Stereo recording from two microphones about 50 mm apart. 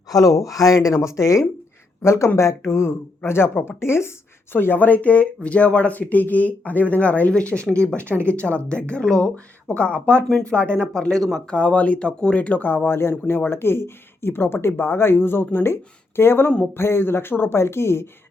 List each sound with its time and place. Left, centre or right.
0.3 s speech: left
2.0 s speech: left
3.2 s speech: left
4.5 s speech: left; by 9.3 s centre
9.3 s speech: left; by 11.4 s centre
11.4 s speech: left